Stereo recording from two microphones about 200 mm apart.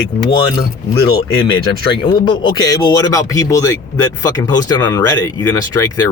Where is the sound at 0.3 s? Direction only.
20° left (ahead or behind).